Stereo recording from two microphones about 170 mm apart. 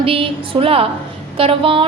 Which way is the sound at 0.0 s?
35° right (ahead or behind).